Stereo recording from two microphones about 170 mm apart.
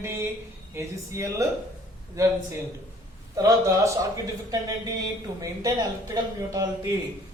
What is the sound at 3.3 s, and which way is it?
Speech, 20° right (ahead or behind).